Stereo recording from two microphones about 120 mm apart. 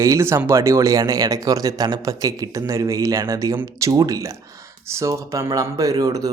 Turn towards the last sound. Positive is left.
turn(degrees=-30)  # may be behind; listen again after turning